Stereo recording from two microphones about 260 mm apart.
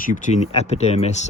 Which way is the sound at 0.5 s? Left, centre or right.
Left.